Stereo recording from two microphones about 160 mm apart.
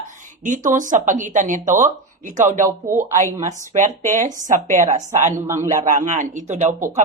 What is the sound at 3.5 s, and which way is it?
Speech, 50° right (ahead or behind).